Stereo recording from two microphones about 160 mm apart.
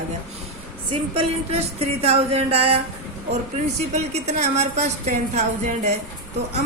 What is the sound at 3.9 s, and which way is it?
A woman's voice, 45° right (ahead or behind).